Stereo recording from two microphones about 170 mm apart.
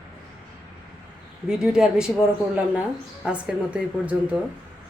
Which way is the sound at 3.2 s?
5° right (ahead or behind).